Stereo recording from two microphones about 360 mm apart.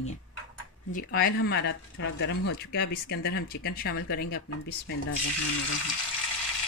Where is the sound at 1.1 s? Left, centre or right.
Left.